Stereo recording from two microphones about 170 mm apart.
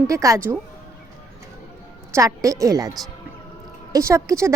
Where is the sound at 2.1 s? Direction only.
20° right (ahead or behind).